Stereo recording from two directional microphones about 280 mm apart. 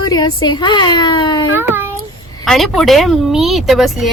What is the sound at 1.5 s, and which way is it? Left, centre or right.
Speech, centre.